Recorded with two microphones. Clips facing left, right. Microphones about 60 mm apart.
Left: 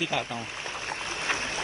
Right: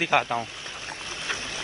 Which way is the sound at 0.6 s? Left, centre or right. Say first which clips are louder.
Left 3 dB; left.